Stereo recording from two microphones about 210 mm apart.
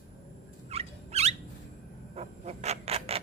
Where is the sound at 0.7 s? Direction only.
30° right (ahead or behind).